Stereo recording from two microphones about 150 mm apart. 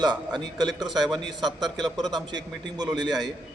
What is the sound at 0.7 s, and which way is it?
Speech, centre (ahead or behind).